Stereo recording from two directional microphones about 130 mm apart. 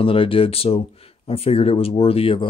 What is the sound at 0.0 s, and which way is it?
Speech, 45° left (ahead or behind).